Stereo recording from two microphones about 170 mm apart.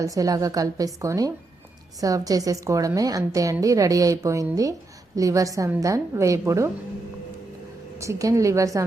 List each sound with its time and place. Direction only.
0.0 s a woman's voice: 20° right (ahead or behind)
7.9 s a woman's voice: 20° right (ahead or behind)